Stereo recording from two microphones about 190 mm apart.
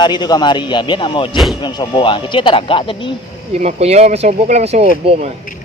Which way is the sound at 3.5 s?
35° right (ahead or behind).